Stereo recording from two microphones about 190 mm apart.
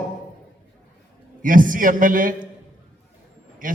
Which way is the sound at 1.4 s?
45° right (ahead or behind).